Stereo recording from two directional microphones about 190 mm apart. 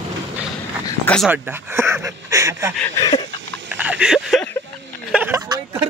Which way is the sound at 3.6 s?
5° right (ahead or behind).